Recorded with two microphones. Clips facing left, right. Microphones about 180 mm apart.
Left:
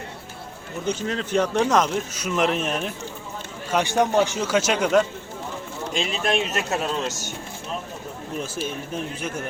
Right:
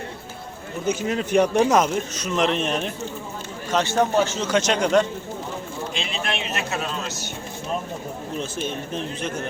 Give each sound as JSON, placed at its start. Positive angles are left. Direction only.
{"t": 0.9, "sound": "speech", "side_deg": -10}
{"t": 2.1, "sound": "speech", "side_deg": 5}
{"t": 5.9, "sound": "a man's voice", "side_deg": 45}
{"t": 8.4, "sound": "speech", "side_deg": 10}